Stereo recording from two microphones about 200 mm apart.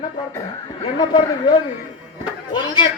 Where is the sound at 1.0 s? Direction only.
20° left (ahead or behind).